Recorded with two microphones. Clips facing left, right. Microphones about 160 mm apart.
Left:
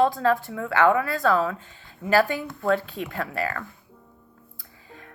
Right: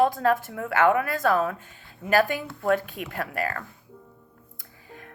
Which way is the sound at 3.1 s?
45° right (ahead or behind).